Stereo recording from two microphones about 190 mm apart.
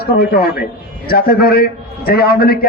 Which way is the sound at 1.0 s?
55° left (ahead or behind).